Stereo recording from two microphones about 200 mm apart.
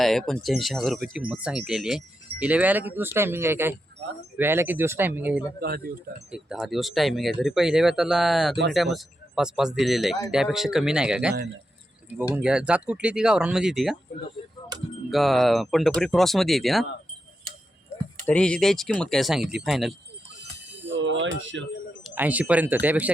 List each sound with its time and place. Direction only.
0.0 s speech: centre (ahead or behind)
5.5 s speech: 50° right (ahead or behind)
6.3 s speech: 5° right (ahead or behind)
15.1 s speech: centre (ahead or behind)
18.3 s speech: 5° left (ahead or behind)
20.8 s speech: 65° right (ahead or behind)
22.0 s speech: 10° right (ahead or behind)